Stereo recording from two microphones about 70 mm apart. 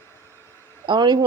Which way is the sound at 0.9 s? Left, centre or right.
Right.